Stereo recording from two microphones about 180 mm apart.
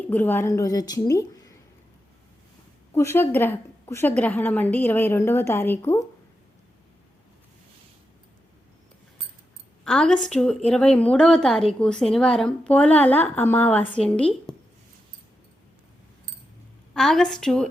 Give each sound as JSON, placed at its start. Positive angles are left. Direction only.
{"t": 0.1, "sound": "a woman's voice", "side_deg": 10}
{"t": 2.9, "sound": "a woman's voice", "side_deg": 15}
{"t": 9.8, "sound": "a woman's voice", "side_deg": 5}
{"t": 14.5, "sound": "a sound", "side_deg": 5}
{"t": 16.9, "sound": "a woman's voice", "side_deg": 5}